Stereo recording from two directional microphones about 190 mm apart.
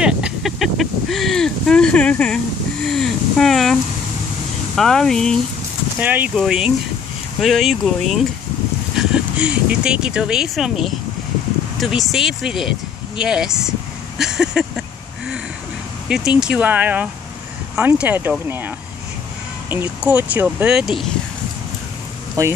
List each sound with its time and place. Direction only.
0.0 s speech: 5° right (ahead or behind)
5.9 s speech: 10° right (ahead or behind)
13.2 s a sound: 5° right (ahead or behind)
16.1 s speech: 5° right (ahead or behind)
19.7 s speech: 10° right (ahead or behind)
22.4 s speech: 15° right (ahead or behind)